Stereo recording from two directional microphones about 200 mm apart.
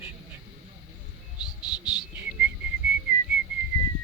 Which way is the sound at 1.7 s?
20° left (ahead or behind).